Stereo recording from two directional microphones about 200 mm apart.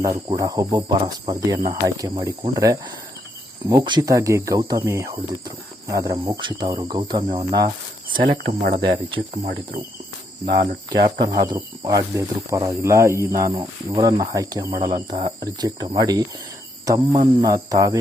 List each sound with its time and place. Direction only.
0.0 s speech: 15° right (ahead or behind)
8.2 s speech: 45° right (ahead or behind)
9.3 s cricket: 40° right (ahead or behind)
10.4 s speech: 50° right (ahead or behind)
10.8 s speech: 20° right (ahead or behind)